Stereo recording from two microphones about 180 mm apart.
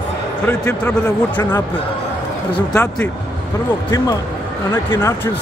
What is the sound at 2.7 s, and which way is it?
Speech, 5° left (ahead or behind).